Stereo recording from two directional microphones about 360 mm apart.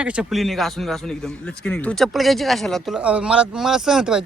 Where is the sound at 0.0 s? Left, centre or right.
Centre.